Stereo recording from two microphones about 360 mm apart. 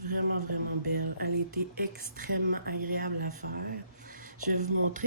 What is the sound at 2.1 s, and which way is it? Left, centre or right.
Speech, right.